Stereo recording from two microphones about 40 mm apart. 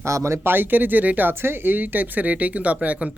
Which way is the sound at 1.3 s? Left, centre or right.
Right.